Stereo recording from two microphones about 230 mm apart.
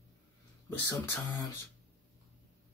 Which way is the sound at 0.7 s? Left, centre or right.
Centre.